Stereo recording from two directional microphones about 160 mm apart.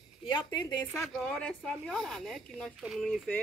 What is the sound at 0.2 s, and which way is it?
Speech, 30° left (ahead or behind).